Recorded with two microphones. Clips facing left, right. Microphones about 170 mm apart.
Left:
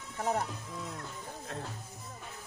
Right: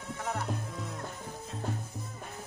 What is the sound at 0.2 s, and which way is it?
Music, 35° left (ahead or behind).